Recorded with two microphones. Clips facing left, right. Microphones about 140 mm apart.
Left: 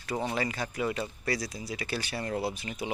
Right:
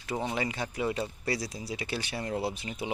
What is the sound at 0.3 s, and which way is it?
Speech, 20° right (ahead or behind).